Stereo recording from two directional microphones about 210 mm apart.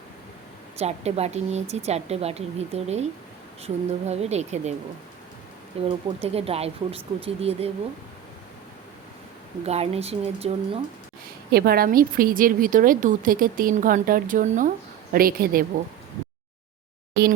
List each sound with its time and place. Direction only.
0.8 s a woman's voice: 30° right (ahead or behind)
5.7 s speech: 25° right (ahead or behind)
9.6 s speech: 30° right (ahead or behind)
11.5 s a woman's voice: 45° right (ahead or behind)